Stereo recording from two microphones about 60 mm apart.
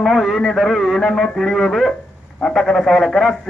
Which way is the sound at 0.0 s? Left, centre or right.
Centre.